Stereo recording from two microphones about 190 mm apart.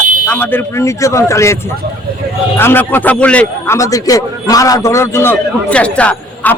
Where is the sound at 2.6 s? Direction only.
10° left (ahead or behind).